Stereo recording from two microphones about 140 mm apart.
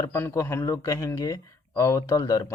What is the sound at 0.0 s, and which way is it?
Speech, 20° left (ahead or behind).